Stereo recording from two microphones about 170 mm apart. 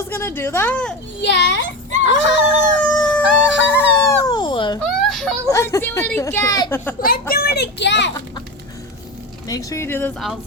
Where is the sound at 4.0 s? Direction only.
20° left (ahead or behind).